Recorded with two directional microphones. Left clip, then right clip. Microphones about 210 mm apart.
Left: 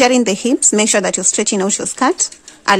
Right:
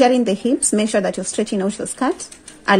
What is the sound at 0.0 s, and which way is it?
Speech, 25° left (ahead or behind).